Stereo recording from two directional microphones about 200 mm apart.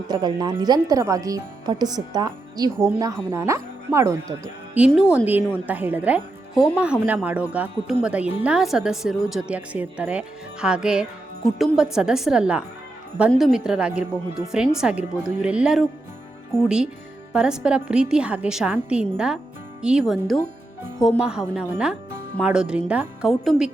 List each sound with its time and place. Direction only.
0.1 s a woman's voice: 20° right (ahead or behind); by 23.7 s centre (ahead or behind)